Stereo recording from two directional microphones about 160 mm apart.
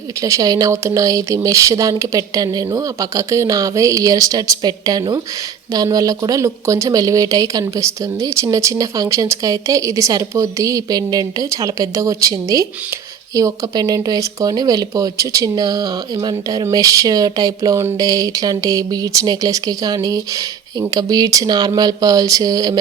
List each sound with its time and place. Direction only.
0.2 s speech: 20° right (ahead or behind)